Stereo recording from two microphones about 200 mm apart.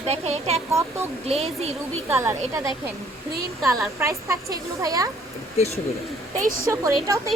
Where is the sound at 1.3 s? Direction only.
30° right (ahead or behind).